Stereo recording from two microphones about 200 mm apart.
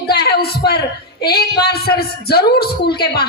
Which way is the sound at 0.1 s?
50° left (ahead or behind).